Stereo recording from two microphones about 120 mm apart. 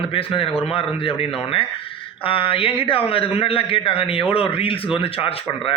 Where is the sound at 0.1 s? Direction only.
50° left (ahead or behind).